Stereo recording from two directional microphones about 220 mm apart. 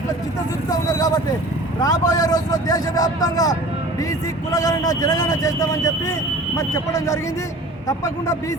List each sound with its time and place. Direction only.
0.7 s vehicle: 15° left (ahead or behind)
1.8 s a man's voice: 15° left (ahead or behind)